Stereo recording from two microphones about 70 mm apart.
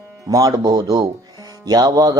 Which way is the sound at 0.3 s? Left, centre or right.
Right.